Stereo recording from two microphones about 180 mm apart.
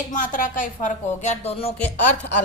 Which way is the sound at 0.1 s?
50° left (ahead or behind).